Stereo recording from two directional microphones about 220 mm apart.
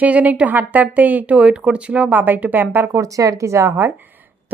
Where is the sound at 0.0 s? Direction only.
5° right (ahead or behind).